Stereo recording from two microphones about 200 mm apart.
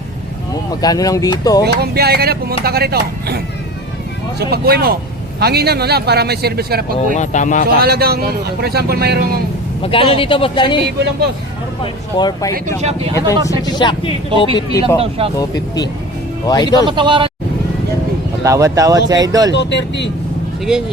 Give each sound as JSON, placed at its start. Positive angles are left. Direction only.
{"t": 0.5, "sound": "speech", "side_deg": 20}
{"t": 1.6, "sound": "speech", "side_deg": -50}
{"t": 7.2, "sound": "speech", "side_deg": 40}
{"t": 7.8, "sound": "speech", "side_deg": -50}
{"t": 9.8, "sound": "speech", "side_deg": 25}
{"t": 12.8, "sound": "speech", "side_deg": -30}
{"t": 13.1, "sound": "speech", "side_deg": 15}
{"t": 14.9, "sound": "speech", "side_deg": -30}
{"t": 15.4, "sound": "speech", "side_deg": 20}
{"t": 16.8, "sound": "speech", "side_deg": -25}
{"t": 18.4, "sound": "speech", "side_deg": -15}
{"t": 19.5, "sound": "speech", "side_deg": 60}